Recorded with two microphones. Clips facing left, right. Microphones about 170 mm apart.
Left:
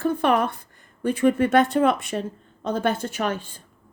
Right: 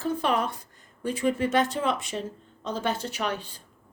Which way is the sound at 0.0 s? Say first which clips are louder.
Left 5 dB; 55° left (ahead or behind).